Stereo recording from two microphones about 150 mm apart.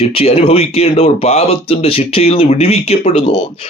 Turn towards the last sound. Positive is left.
turn(degrees=40)  # may be behind; listen again after turning